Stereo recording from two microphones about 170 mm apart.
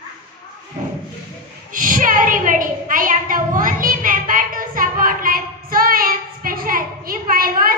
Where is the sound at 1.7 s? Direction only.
55° right (ahead or behind).